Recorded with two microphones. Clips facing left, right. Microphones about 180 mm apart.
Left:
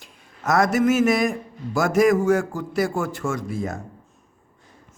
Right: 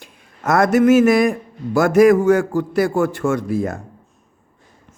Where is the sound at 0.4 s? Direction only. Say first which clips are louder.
Right 5 dB; 55° right (ahead or behind).